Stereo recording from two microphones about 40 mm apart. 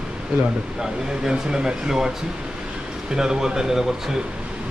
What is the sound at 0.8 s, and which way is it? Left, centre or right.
Speech, centre.